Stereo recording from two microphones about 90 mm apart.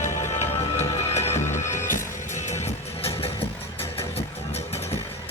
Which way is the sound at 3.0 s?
90° left.